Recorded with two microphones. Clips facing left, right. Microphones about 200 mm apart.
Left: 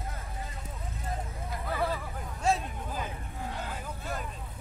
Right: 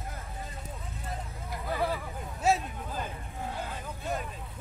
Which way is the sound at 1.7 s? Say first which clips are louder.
Right 1 dB; 15° right (ahead or behind).